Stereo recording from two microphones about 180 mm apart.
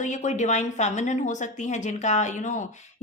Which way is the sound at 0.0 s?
45° left (ahead or behind).